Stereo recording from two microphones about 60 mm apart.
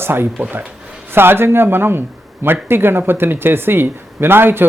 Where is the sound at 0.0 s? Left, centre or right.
Right.